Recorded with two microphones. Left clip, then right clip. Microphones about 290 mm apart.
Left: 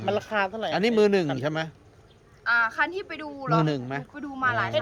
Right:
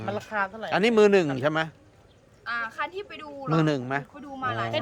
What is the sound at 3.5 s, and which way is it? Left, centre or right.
Speech, centre.